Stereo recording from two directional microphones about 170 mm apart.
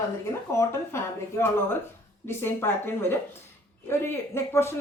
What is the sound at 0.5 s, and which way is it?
Speech, 15° left (ahead or behind).